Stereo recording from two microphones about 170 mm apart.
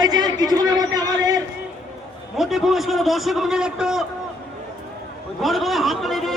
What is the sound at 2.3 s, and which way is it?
A man's voice, centre (ahead or behind).